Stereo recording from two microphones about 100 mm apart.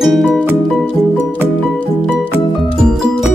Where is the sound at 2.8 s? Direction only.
5° right (ahead or behind).